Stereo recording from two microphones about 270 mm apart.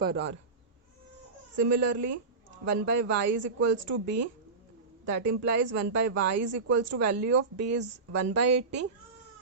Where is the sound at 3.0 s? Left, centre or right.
Right.